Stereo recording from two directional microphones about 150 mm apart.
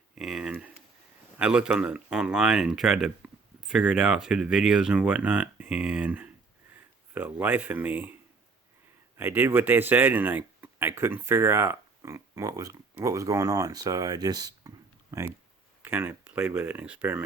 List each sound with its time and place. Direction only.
0.2 s a sound: 5° right (ahead or behind)
1.4 s speech: 5° right (ahead or behind)
9.1 s speech: 15° right (ahead or behind)